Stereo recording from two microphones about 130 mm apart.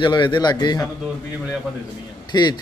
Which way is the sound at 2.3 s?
35° left (ahead or behind).